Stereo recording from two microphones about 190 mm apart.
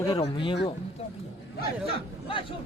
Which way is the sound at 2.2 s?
25° left (ahead or behind).